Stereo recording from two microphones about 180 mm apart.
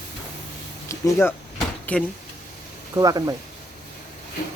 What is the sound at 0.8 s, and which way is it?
Speech, 15° left (ahead or behind).